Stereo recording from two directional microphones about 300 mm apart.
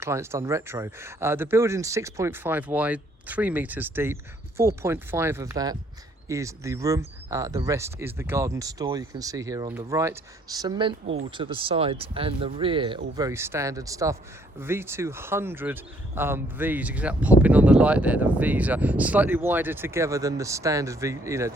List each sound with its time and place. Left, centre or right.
0.0 s speech: centre
11.0 s speech: right
11.3 s speech: centre